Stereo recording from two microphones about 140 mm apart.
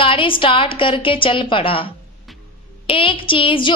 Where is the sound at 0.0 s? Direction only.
40° left (ahead or behind).